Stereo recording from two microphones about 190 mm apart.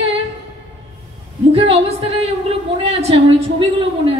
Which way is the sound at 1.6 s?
30° right (ahead or behind).